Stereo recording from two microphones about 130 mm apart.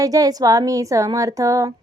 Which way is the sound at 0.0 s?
25° right (ahead or behind).